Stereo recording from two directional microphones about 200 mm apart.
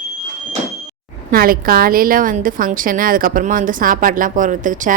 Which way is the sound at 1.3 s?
45° right (ahead or behind).